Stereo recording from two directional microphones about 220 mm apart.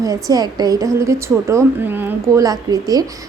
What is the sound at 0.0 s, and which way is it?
A woman's voice, 15° right (ahead or behind).